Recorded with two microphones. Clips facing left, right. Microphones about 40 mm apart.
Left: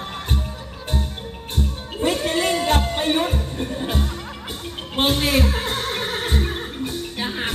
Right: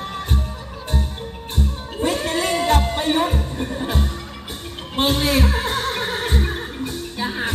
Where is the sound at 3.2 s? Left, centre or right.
Centre.